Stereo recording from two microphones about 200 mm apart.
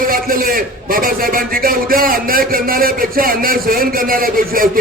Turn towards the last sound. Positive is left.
turn(degrees=-45)  # may be behind; listen again after turning